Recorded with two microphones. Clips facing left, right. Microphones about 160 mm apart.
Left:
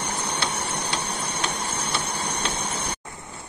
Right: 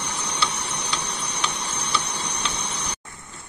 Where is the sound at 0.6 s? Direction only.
50° left (ahead or behind).